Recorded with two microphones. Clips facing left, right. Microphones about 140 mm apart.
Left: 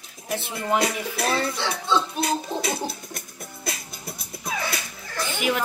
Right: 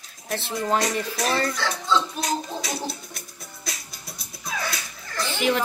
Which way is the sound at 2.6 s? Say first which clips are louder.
Left 3 dB; 60° left (ahead or behind).